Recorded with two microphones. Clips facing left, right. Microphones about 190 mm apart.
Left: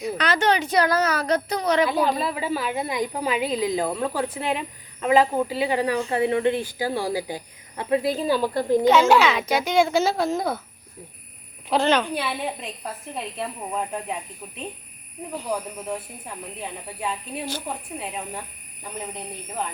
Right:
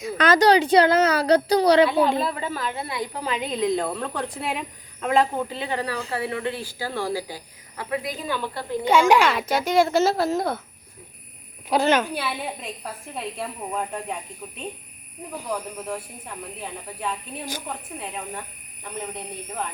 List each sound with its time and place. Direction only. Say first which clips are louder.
0.2 s a woman's voice: right 6 dB; 40° right (ahead or behind)
1.9 s speech: right 2 dB; centre (ahead or behind); by 8.4 s 30° left (ahead or behind)
8.8 s a woman's voice: right 1 dB; 10° right (ahead or behind)
11.7 s a woman's voice: even; 10° right (ahead or behind)
15.4 s a woman's voice: left 1 dB; 5° left (ahead or behind)